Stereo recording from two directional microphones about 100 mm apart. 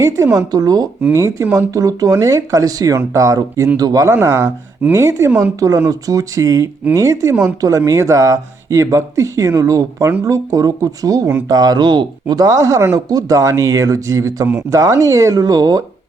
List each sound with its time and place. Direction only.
0.0 s speech: 30° right (ahead or behind)
1.1 s speech: 30° right (ahead or behind)
4.1 s a woman's voice: 25° right (ahead or behind)